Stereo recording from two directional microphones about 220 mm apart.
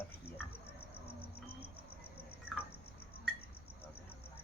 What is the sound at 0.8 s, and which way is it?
Cricket, 25° left (ahead or behind).